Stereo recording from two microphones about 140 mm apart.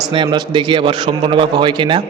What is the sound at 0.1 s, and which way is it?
A man's voice, 35° right (ahead or behind).